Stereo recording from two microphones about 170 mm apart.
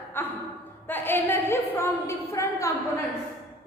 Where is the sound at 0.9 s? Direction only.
10° left (ahead or behind).